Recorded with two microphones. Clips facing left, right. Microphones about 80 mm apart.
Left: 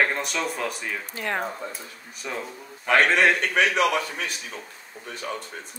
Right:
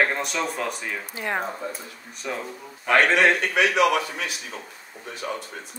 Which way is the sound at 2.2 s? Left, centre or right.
Centre.